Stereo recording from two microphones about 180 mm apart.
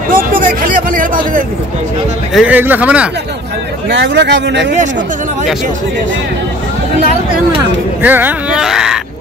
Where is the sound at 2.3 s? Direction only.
10° right (ahead or behind).